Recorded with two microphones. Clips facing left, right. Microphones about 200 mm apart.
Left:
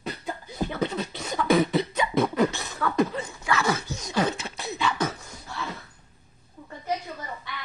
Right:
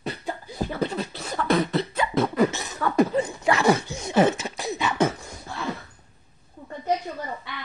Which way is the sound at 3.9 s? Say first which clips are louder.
Right 6 dB; 30° right (ahead or behind).